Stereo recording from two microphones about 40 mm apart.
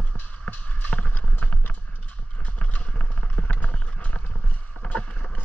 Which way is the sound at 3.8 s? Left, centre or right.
Left.